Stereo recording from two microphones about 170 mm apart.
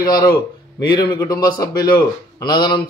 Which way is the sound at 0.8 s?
25° left (ahead or behind).